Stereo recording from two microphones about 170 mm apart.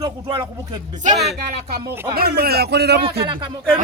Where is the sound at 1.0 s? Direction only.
45° right (ahead or behind).